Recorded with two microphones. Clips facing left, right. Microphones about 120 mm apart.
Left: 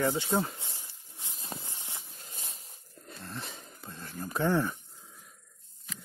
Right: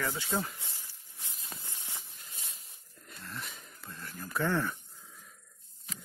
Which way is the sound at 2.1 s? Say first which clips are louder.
Left 4 dB; 40° left (ahead or behind).